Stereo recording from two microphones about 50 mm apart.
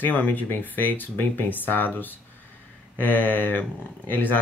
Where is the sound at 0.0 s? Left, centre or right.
Left.